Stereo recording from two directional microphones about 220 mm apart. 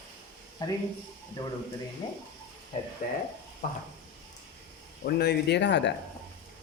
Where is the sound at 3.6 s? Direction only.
40° left (ahead or behind).